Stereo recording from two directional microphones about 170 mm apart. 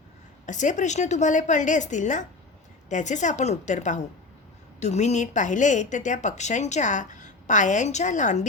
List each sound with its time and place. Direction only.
0.4 s a woman's voice: 45° left (ahead or behind)